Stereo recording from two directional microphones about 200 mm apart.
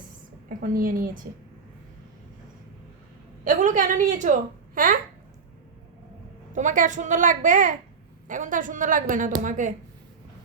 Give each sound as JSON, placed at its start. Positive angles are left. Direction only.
{"t": 0.4, "sound": "a woman's voice", "side_deg": -45}
{"t": 3.4, "sound": "a woman's voice", "side_deg": -40}
{"t": 6.5, "sound": "a woman's voice", "side_deg": -40}